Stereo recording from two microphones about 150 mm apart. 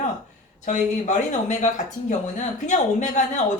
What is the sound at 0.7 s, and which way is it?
Speech, 55° left (ahead or behind).